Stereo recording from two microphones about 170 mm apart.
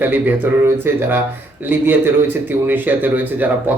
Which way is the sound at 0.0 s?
10° right (ahead or behind).